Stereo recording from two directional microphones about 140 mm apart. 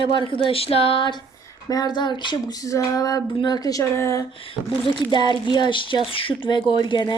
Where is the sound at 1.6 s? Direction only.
30° left (ahead or behind).